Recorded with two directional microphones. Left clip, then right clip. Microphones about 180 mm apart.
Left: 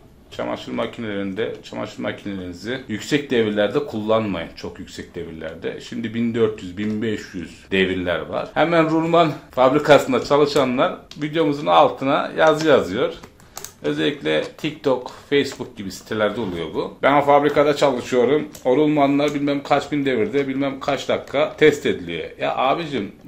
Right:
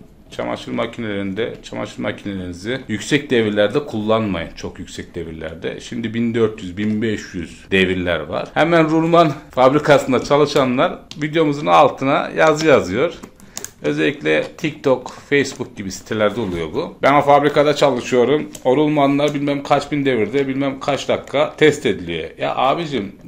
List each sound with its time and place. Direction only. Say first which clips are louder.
0.4 s speech: right 2 dB; 40° right (ahead or behind)
13.8 s speech: right 4 dB; 45° right (ahead or behind)